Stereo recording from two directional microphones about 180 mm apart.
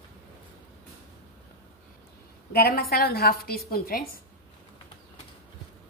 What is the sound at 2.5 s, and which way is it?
A woman's voice, 60° left (ahead or behind).